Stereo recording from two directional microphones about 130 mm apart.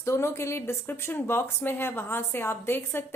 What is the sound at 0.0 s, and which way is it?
A woman's voice, 20° left (ahead or behind).